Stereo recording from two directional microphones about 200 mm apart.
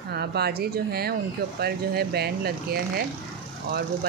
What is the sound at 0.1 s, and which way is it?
Speech, 55° right (ahead or behind).